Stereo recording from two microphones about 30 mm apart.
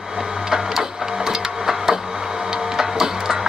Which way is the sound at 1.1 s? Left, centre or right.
Centre.